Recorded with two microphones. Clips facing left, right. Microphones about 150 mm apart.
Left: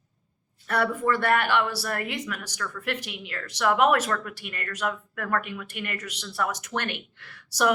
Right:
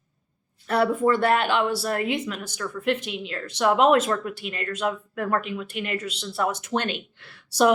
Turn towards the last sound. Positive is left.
turn(degrees=-25)  # may be behind; listen again after turning